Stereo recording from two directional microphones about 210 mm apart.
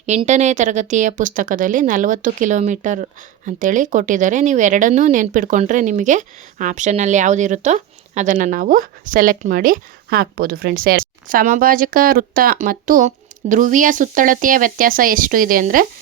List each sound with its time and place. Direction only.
0.0 s speech: 35° right (ahead or behind)